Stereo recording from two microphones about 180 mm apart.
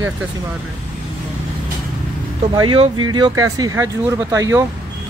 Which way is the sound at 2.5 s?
30° right (ahead or behind).